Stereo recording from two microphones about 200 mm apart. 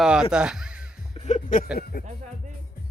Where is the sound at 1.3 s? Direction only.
35° left (ahead or behind).